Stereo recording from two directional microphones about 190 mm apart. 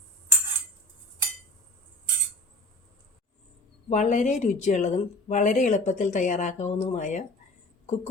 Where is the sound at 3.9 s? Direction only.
40° left (ahead or behind).